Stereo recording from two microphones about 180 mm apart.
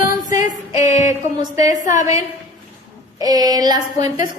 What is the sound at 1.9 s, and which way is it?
Speech, 45° left (ahead or behind).